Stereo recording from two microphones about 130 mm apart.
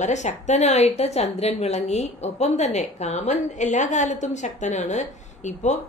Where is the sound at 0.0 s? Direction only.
65° left (ahead or behind).